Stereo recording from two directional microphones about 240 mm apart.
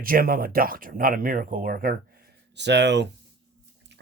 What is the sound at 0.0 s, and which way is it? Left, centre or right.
Speech, right.